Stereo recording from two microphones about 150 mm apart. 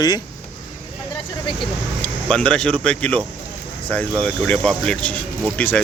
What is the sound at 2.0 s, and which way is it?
Speech, 5° left (ahead or behind).